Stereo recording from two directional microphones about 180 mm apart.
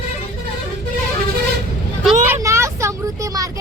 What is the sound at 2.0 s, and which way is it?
Vehicle, 15° right (ahead or behind).